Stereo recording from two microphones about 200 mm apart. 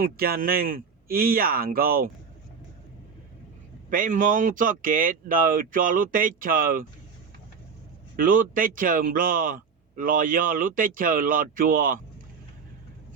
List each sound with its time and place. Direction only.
0.0 s speech: 45° right (ahead or behind)
3.8 s speech: 45° right (ahead or behind)
8.1 s speech: 45° right (ahead or behind)